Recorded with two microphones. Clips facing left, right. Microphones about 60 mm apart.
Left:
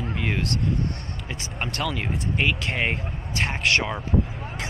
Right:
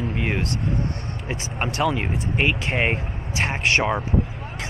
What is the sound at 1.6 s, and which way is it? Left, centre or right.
Speech, centre.